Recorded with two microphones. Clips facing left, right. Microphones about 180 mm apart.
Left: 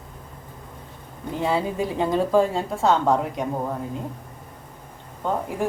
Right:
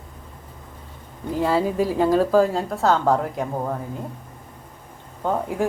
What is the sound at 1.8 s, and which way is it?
A woman's voice, centre (ahead or behind).